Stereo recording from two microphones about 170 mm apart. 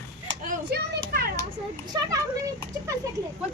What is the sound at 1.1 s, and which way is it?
Children playing, 65° right (ahead or behind).